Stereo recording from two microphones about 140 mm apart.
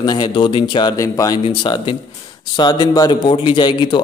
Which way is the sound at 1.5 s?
35° left (ahead or behind).